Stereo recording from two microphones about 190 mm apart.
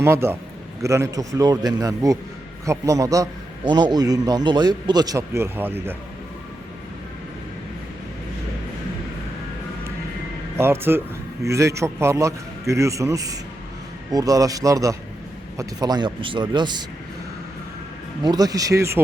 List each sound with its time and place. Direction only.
0.0 s a man's voice: 15° right (ahead or behind)
10.6 s a man's voice: 10° right (ahead or behind)
18.2 s a man's voice: 20° right (ahead or behind)